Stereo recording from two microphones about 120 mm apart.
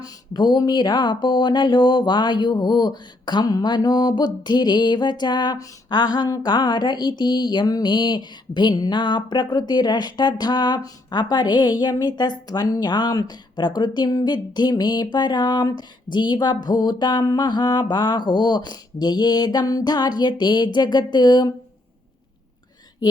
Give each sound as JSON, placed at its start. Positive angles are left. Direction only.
{"t": 0.0, "sound": "speech", "side_deg": 35}